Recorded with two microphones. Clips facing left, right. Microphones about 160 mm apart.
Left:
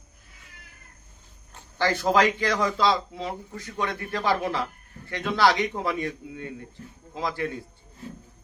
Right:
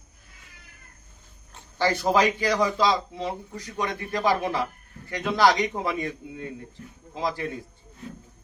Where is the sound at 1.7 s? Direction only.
10° right (ahead or behind).